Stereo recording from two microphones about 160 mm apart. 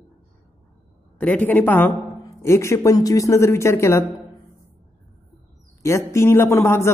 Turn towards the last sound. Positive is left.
turn(degrees=15)  # may be behind; listen again after turning